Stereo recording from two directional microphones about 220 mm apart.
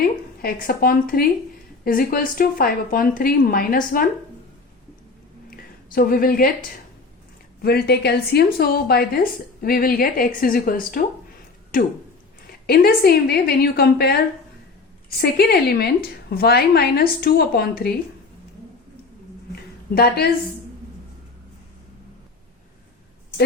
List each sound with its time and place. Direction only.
0.4 s a woman's voice: 40° left (ahead or behind)
5.5 s a woman's voice: 40° left (ahead or behind)
15.2 s a woman's voice: 45° left (ahead or behind)
19.9 s a woman's voice: 45° left (ahead or behind)